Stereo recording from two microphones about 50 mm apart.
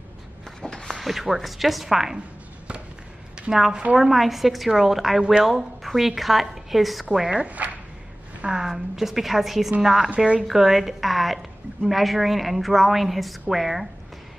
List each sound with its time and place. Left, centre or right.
0.6 s a sound: centre
0.9 s a woman's voice: centre
3.3 s a woman's voice: centre
7.1 s a woman's voice: centre
7.4 s speech: right
8.5 s a woman's voice: centre
10.1 s speech: right
10.4 s a woman's voice: centre